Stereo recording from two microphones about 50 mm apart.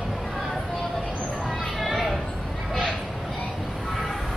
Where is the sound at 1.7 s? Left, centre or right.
Centre.